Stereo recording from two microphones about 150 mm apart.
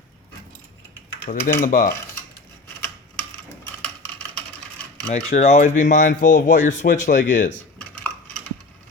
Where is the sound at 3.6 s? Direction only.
10° left (ahead or behind).